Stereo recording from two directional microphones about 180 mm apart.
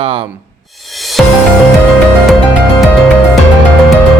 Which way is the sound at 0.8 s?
Centre (ahead or behind).